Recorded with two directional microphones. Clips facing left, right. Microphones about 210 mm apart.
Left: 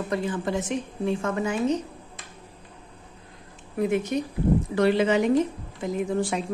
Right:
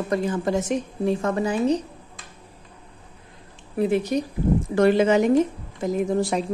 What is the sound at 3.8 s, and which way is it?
A woman's voice, 35° right (ahead or behind).